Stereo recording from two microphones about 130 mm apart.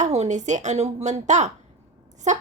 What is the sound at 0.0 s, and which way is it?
A woman's voice, 60° right (ahead or behind).